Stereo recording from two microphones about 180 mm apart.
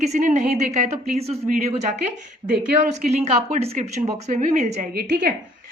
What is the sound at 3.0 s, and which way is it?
A woman's voice, 40° right (ahead or behind).